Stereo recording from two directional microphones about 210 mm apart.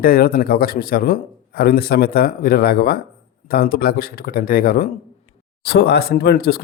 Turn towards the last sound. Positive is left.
turn(degrees=45)  # may be behind; listen again after turning